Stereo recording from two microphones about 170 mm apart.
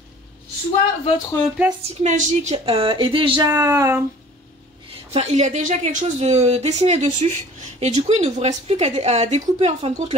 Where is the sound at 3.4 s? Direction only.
15° right (ahead or behind).